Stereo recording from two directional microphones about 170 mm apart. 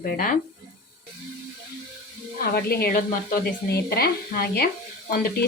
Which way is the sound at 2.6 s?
65° left (ahead or behind).